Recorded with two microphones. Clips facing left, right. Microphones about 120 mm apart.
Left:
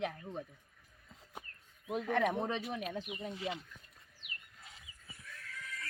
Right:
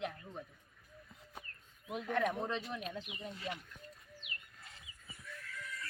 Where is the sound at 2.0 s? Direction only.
75° left (ahead or behind).